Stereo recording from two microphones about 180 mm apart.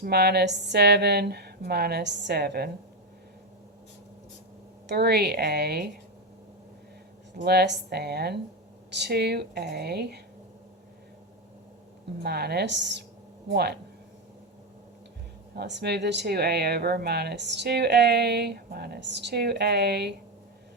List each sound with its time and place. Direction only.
0.0 s a woman's voice: 65° right (ahead or behind)
4.9 s a woman's voice: 65° right (ahead or behind)
7.4 s a woman's voice: 70° right (ahead or behind)
12.2 s a woman's voice: 65° right (ahead or behind)
15.5 s speech: 70° right (ahead or behind)